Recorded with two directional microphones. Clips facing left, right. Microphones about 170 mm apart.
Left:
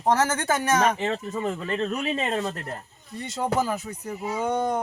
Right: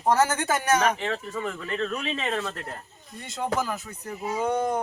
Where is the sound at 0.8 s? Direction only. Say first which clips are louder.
Left 2 dB; 25° left (ahead or behind).